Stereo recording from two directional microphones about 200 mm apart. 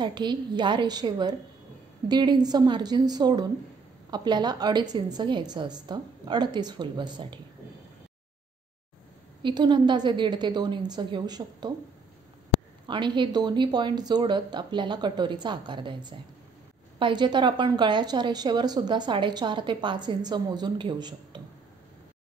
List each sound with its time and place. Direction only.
0.0 s a woman's voice: 20° right (ahead or behind)
9.4 s a woman's voice: 20° right (ahead or behind)
12.8 s a woman's voice: 25° right (ahead or behind)